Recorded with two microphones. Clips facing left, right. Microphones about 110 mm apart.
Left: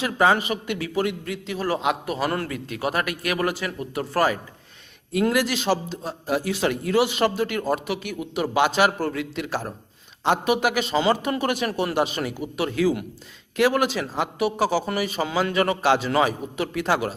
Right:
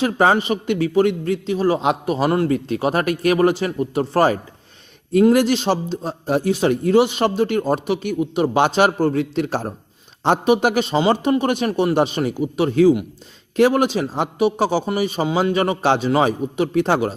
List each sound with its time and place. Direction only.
0.0 s a man's voice: 35° right (ahead or behind)
1.5 s a man's voice: 20° right (ahead or behind)
6.5 s a man's voice: 20° right (ahead or behind)